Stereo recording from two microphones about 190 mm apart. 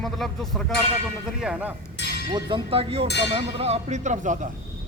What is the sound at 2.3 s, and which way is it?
Speech, 25° right (ahead or behind).